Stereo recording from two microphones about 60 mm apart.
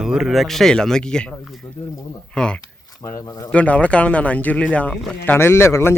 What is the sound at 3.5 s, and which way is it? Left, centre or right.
A man's voice, left.